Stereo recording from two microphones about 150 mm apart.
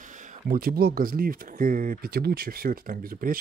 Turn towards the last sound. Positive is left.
turn(degrees=-70)  # may be behind; listen again after turning